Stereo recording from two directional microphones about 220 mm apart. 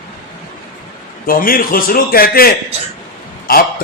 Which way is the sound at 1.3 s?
40° left (ahead or behind).